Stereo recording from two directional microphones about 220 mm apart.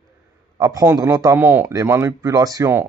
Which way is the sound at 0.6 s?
15° right (ahead or behind).